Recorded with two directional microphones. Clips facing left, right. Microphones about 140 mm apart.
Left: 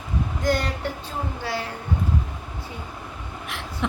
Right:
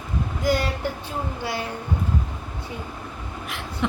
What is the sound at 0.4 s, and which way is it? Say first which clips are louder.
Speech: right 1 dB; 5° right (ahead or behind).